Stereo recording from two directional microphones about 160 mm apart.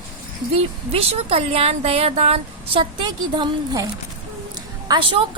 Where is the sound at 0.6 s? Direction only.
35° right (ahead or behind).